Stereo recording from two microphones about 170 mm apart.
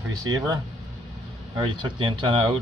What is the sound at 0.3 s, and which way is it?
Speech, 25° right (ahead or behind).